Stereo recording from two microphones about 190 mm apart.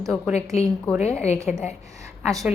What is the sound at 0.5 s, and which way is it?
Speech, 35° left (ahead or behind).